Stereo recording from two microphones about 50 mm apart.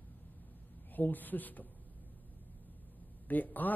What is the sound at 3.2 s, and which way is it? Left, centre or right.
Speech, left.